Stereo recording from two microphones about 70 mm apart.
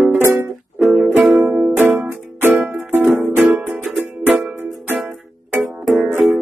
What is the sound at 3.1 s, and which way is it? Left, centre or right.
Music, centre.